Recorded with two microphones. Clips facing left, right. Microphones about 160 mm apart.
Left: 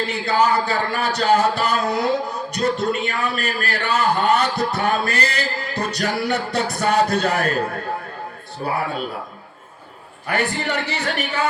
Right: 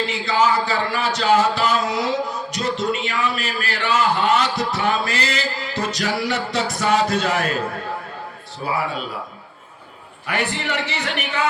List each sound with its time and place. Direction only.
0.1 s a man's voice: 55° left (ahead or behind)
4.8 s music: 50° left (ahead or behind)
6.6 s a man's voice: 60° left (ahead or behind)
7.2 s speech: 40° left (ahead or behind)
8.6 s music: 45° left (ahead or behind)
10.2 s speech: 45° left (ahead or behind)